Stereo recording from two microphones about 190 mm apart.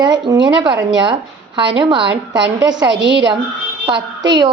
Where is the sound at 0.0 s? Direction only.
20° right (ahead or behind).